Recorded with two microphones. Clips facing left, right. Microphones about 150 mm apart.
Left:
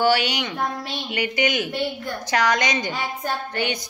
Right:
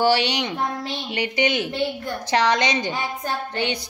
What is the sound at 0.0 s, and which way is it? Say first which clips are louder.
Speech: right 1 dB; 30° right (ahead or behind).